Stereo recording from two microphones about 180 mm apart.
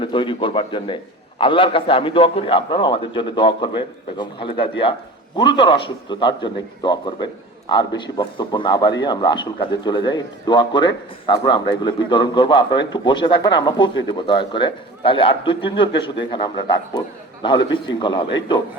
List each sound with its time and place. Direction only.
0.0 s a man's voice: 25° left (ahead or behind)